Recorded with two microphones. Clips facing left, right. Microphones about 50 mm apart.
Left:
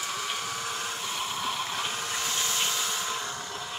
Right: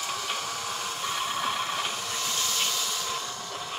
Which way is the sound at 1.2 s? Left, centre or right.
Right.